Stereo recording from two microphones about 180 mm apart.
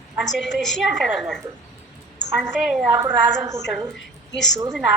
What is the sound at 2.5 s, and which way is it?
Speech, 5° right (ahead or behind).